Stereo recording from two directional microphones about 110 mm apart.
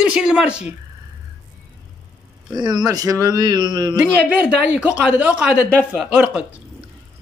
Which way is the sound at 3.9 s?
10° right (ahead or behind).